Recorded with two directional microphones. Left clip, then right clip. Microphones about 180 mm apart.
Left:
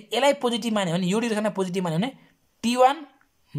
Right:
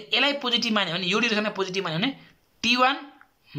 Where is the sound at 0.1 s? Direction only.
40° left (ahead or behind).